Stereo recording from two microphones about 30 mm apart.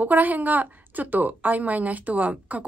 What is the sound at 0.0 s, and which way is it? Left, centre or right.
A woman's voice, right.